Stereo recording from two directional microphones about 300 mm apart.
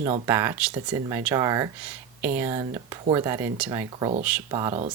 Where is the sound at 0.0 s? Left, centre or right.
Centre.